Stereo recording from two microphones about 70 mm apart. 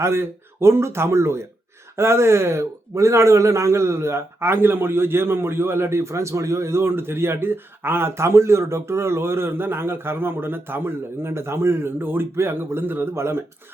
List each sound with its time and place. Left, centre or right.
0.0 s speech: right